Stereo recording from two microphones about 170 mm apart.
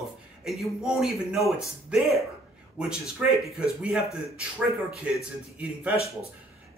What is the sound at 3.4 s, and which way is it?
Speech, 5° right (ahead or behind).